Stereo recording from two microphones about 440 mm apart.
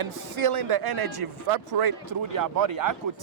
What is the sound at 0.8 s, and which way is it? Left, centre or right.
Speech, right.